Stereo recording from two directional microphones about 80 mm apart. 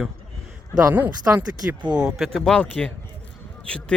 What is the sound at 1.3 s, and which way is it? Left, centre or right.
Speech, right.